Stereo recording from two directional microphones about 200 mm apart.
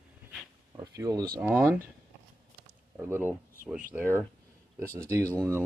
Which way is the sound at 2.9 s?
10° right (ahead or behind).